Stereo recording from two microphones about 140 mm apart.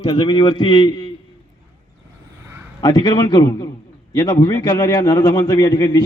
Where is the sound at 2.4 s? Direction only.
15° right (ahead or behind).